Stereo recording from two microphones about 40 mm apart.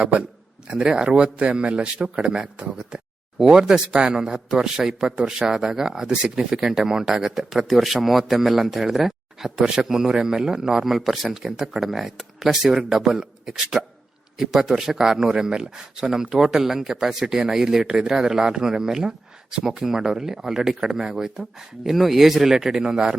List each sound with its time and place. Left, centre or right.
0.0 s a man's voice: right
2.7 s a sound: centre
3.5 s a man's voice: centre
9.6 s a man's voice: centre
10.9 s speech: centre
11.3 s a man's voice: centre
21.8 s a man's voice: centre